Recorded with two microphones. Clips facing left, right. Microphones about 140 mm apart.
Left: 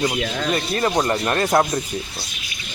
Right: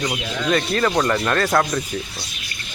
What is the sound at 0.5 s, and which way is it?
Speech, 25° left (ahead or behind).